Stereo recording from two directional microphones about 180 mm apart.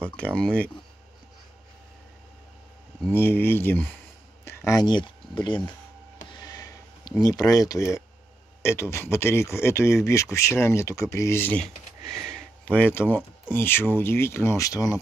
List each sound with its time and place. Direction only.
0.0 s speech: 5° left (ahead or behind)
3.0 s speech: 10° left (ahead or behind)
6.3 s a sound: 20° left (ahead or behind)
8.9 s speech: 15° left (ahead or behind)